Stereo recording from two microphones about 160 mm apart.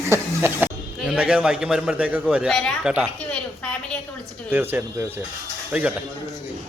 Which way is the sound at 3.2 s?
5° left (ahead or behind).